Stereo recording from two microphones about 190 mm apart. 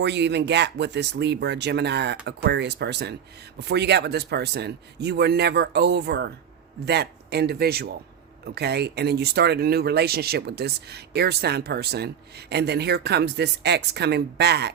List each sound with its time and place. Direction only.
0.0 s speech: 65° right (ahead or behind)